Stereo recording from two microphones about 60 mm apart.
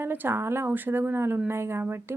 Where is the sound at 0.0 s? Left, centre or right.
Right.